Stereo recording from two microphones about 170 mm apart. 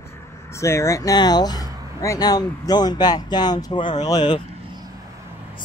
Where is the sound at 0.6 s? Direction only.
15° left (ahead or behind).